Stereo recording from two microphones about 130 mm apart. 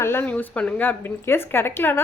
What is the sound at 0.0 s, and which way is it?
A woman's voice, 15° left (ahead or behind).